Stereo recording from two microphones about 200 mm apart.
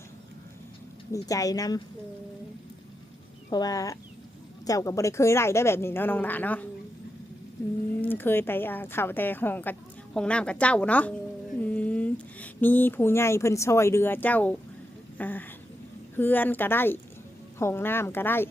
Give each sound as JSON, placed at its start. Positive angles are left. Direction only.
{"t": 1.1, "sound": "speech", "side_deg": 15}
{"t": 3.5, "sound": "speech", "side_deg": 20}
{"t": 8.0, "sound": "a woman's voice", "side_deg": 10}
{"t": 15.2, "sound": "a sound", "side_deg": 10}
{"t": 16.1, "sound": "speech", "side_deg": 10}